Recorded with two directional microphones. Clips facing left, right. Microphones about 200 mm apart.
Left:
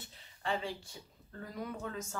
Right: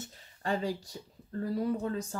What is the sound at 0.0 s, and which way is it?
Speech, 45° right (ahead or behind).